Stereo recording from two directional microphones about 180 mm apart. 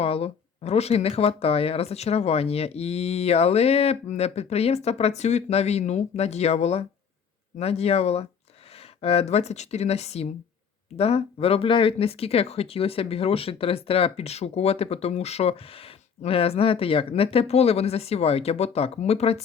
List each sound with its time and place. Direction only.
0.0 s speech: 35° left (ahead or behind)